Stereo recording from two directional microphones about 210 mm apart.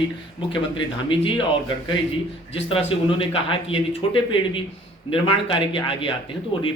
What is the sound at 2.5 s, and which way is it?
Speech, 25° left (ahead or behind).